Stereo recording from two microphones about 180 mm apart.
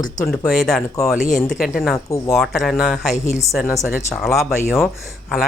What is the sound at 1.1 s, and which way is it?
Speech, 45° left (ahead or behind).